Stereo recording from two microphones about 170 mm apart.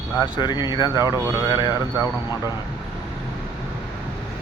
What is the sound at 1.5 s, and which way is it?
Speech, 25° left (ahead or behind).